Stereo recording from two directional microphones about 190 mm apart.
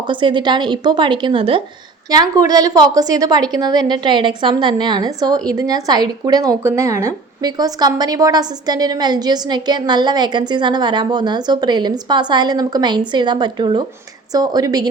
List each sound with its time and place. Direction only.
0.1 s a woman's voice: 25° right (ahead or behind)